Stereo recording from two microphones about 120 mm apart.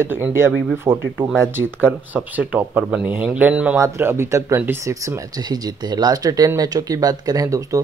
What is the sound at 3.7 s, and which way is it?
Speech, 20° right (ahead or behind).